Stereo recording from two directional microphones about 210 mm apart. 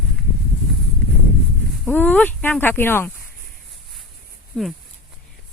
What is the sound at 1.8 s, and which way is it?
Speech, 10° left (ahead or behind).